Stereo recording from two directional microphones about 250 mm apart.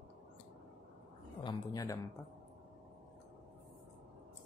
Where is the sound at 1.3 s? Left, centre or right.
Centre.